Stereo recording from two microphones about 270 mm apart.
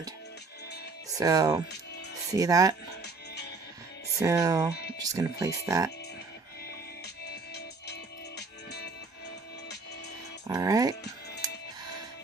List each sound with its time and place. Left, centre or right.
1.2 s speech: centre
4.2 s speech: centre
6.7 s music: left
10.4 s speech: centre